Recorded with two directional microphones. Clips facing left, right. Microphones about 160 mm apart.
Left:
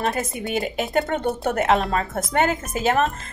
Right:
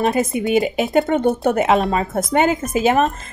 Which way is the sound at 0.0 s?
20° right (ahead or behind).